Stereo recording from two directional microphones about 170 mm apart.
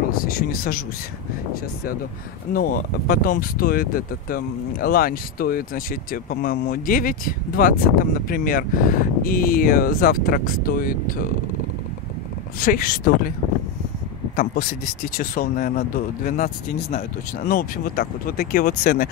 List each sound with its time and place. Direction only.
0.2 s speech: 60° left (ahead or behind)
2.5 s speech: 55° left (ahead or behind)
12.5 s speech: 55° left (ahead or behind)
14.3 s speech: 55° left (ahead or behind)